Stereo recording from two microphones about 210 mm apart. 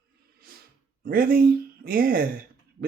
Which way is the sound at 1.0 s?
45° right (ahead or behind).